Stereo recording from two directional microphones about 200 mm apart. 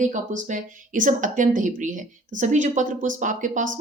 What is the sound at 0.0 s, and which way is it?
Speech, 40° right (ahead or behind).